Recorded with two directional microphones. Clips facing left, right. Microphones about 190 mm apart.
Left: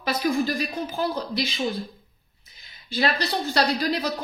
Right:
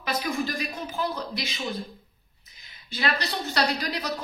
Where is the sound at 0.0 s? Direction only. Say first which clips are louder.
Left 5 dB; 35° left (ahead or behind).